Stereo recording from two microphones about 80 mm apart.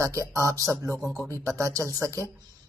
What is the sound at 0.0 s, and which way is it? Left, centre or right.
A woman's voice, right.